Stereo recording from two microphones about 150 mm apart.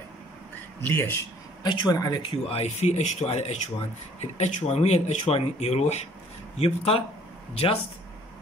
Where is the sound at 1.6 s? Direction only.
25° left (ahead or behind).